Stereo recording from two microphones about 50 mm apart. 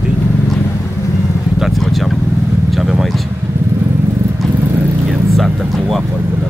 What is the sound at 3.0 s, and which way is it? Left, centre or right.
Speech, centre.